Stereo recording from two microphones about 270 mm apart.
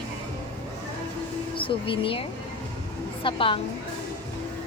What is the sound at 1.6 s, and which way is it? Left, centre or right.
A woman's voice, centre.